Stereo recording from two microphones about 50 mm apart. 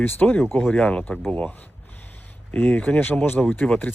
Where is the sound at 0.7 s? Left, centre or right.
Left.